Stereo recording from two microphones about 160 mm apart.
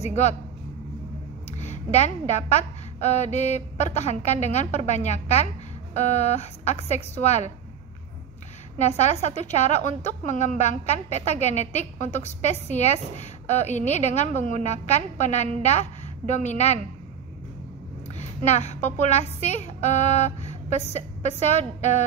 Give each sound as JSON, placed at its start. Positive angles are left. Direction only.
{"t": 0.0, "sound": "a woman's voice", "side_deg": 45}
{"t": 1.6, "sound": "a woman's voice", "side_deg": 45}
{"t": 8.7, "sound": "a woman's voice", "side_deg": 45}
{"t": 18.1, "sound": "speech", "side_deg": 45}